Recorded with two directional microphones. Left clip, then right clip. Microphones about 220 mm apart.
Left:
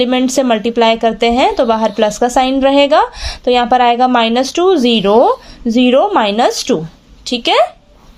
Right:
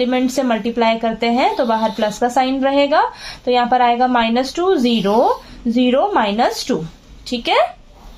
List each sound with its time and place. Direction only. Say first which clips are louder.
0.0 s speech: left 5 dB; 40° left (ahead or behind)